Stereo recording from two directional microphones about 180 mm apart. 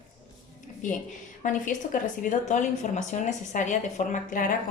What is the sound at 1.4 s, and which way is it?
A woman's voice, 45° left (ahead or behind).